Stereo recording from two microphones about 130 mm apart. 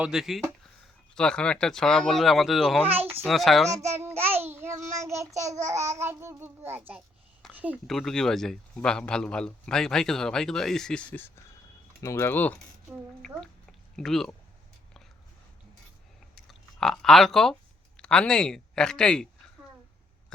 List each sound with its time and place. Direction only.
0.0 s a man's voice: 5° right (ahead or behind)
2.8 s a child's voice: 15° right (ahead or behind)
3.2 s a man's voice: centre (ahead or behind)
3.9 s child singing: 20° right (ahead or behind)
7.5 s a sound: 10° right (ahead or behind)
7.9 s a man's voice: centre (ahead or behind)
16.3 s a sound: centre (ahead or behind)